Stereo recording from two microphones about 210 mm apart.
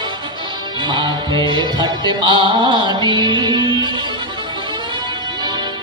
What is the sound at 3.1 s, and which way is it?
Music, 20° right (ahead or behind).